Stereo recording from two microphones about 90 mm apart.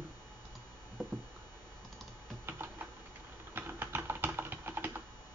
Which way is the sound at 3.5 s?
25° right (ahead or behind).